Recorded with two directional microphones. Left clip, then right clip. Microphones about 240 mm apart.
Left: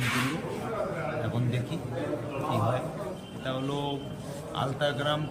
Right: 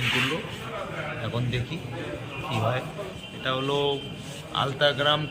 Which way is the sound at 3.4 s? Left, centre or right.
Centre.